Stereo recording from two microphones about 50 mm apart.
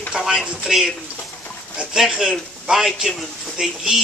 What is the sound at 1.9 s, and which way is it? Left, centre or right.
Speech, centre.